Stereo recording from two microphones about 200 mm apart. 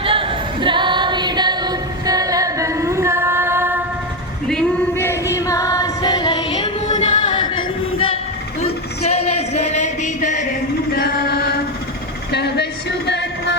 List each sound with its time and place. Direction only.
0.0 s female singing: 25° right (ahead or behind)
4.4 s music: 10° left (ahead or behind)
6.9 s singing: 35° left (ahead or behind)
7.2 s singing: 25° left (ahead or behind)
8.6 s a sound: 30° left (ahead or behind)
10.9 s chant: 50° left (ahead or behind)
12.3 s a sound: 55° left (ahead or behind)
13.1 s music: 60° left (ahead or behind)